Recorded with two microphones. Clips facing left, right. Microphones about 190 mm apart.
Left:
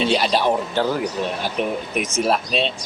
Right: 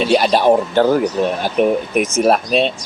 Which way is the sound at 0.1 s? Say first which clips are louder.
Right 6 dB; 50° right (ahead or behind).